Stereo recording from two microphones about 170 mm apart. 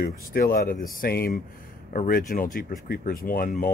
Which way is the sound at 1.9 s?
50° left (ahead or behind).